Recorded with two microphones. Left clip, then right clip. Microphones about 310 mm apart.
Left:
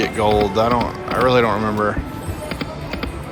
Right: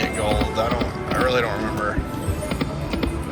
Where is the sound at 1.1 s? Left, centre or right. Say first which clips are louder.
Left 5 dB; centre.